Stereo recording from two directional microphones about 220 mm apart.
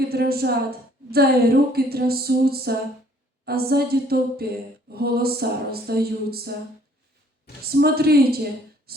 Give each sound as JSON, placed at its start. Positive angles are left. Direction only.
{"t": 0.1, "sound": "a woman's voice", "side_deg": -45}
{"t": 7.6, "sound": "a woman's voice", "side_deg": -45}